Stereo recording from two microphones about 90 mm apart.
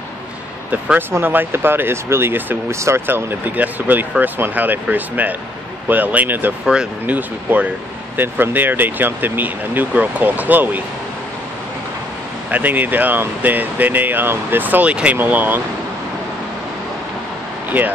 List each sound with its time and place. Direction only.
0.7 s speech: 15° right (ahead or behind)
6.6 s speech: 10° right (ahead or behind)
12.4 s speech: 20° right (ahead or behind)